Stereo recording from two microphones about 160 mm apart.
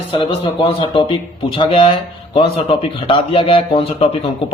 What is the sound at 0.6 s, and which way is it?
Speech, 30° left (ahead or behind).